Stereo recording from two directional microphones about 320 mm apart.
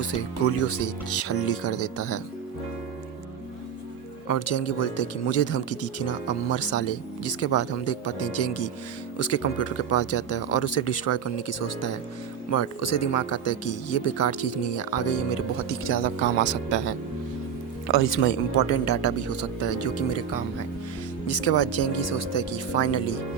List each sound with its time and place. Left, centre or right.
0.1 s speech: left
4.3 s speech: left